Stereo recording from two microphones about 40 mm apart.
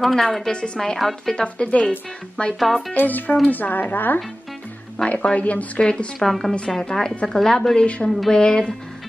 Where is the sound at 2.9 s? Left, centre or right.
Left.